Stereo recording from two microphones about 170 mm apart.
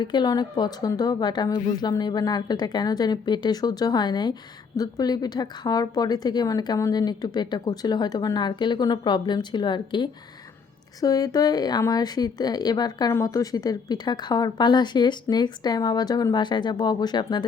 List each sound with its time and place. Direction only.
0.0 s speech: 25° left (ahead or behind)